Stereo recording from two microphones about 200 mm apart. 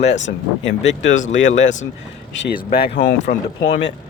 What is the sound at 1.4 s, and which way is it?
Speech, 70° left (ahead or behind).